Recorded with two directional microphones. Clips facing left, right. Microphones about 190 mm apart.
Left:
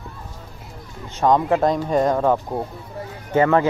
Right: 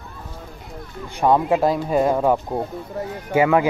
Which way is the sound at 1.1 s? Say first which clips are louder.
Even; 10° right (ahead or behind).